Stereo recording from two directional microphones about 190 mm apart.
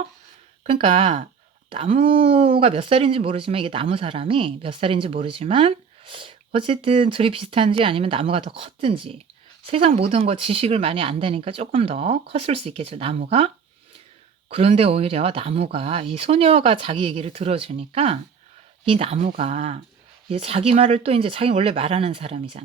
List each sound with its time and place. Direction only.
0.6 s speech: 30° right (ahead or behind)
14.5 s speech: 30° right (ahead or behind)